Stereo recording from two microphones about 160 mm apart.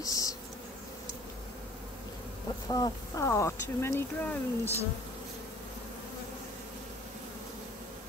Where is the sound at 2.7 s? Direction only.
20° left (ahead or behind).